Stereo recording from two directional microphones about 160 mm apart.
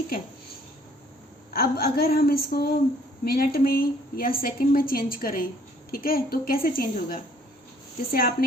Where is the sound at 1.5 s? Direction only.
70° left (ahead or behind).